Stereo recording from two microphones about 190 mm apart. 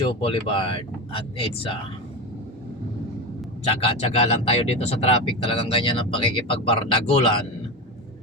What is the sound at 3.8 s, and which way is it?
Speech, 30° left (ahead or behind).